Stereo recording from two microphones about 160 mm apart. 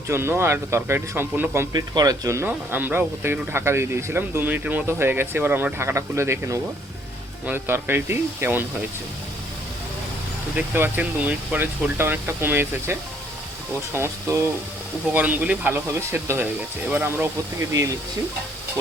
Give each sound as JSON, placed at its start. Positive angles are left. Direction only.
{"t": 0.1, "sound": "speech", "side_deg": -15}
{"t": 10.5, "sound": "speech", "side_deg": -10}